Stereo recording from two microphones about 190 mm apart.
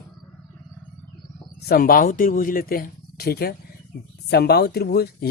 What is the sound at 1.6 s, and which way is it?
Speech, 50° left (ahead or behind).